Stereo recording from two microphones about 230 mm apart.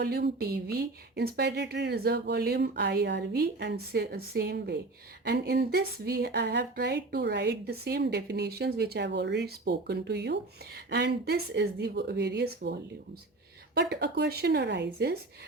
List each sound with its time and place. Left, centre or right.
0.0 s speech: right
13.7 s speech: right